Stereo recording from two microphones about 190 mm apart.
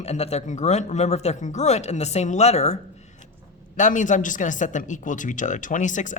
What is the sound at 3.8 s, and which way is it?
Speech, 40° left (ahead or behind).